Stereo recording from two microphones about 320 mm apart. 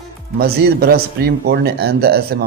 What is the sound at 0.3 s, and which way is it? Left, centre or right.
Speech, right.